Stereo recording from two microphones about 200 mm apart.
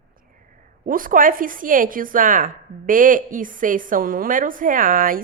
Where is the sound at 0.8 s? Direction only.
45° right (ahead or behind).